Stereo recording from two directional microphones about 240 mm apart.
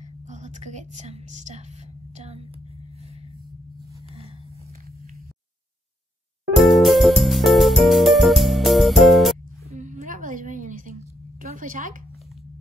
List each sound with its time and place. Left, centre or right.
0.3 s a woman's voice: right
6.5 s music: centre
9.7 s a sound: right